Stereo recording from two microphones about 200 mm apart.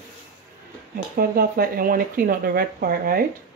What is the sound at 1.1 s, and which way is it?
Speech, 45° right (ahead or behind).